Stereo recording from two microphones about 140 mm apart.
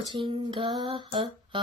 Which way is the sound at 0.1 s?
40° right (ahead or behind).